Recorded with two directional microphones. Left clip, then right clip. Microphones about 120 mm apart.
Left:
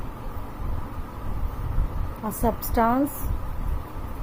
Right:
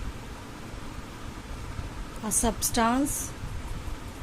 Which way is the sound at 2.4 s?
20° right (ahead or behind).